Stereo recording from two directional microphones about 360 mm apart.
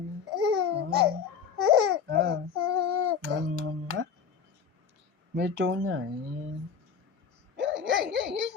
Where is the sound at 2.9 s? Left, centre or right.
Right.